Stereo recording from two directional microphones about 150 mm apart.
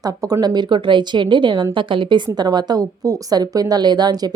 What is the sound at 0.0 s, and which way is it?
A woman's voice, 25° right (ahead or behind).